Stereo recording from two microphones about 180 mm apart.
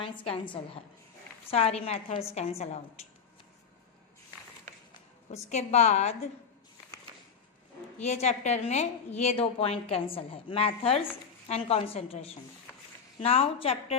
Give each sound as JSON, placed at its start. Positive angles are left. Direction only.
{"t": 0.0, "sound": "a woman's voice", "side_deg": 30}
{"t": 1.5, "sound": "a woman's voice", "side_deg": 35}
{"t": 5.3, "sound": "a woman's voice", "side_deg": 40}
{"t": 8.0, "sound": "a woman's voice", "side_deg": 40}